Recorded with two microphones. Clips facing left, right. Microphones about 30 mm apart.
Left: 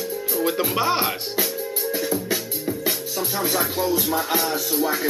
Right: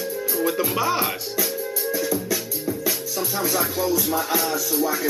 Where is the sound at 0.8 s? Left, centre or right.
Left.